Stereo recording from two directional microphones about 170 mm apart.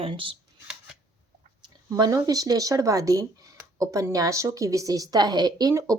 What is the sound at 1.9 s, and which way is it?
A woman's voice, 20° right (ahead or behind).